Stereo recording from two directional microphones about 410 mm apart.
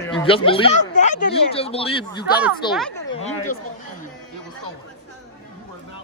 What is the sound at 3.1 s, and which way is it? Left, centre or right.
Speech, centre.